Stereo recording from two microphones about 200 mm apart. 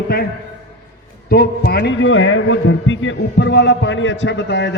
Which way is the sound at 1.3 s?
50° left (ahead or behind).